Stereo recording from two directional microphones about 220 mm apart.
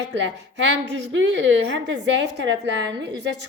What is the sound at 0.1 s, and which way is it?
A woman's voice, 55° right (ahead or behind).